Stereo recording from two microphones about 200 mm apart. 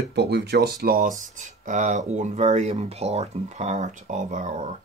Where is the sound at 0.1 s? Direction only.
55° right (ahead or behind).